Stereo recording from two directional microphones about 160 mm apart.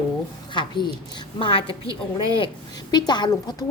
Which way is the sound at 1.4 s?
35° left (ahead or behind).